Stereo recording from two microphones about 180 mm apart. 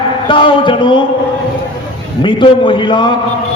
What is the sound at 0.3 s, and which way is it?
Speech, 30° left (ahead or behind).